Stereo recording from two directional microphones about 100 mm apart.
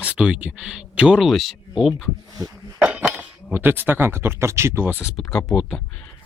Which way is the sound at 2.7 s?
15° right (ahead or behind).